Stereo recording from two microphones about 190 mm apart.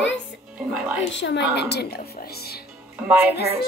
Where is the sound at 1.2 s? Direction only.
70° left (ahead or behind).